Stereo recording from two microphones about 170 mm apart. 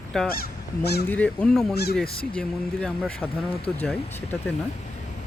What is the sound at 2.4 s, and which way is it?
Speech, 5° left (ahead or behind).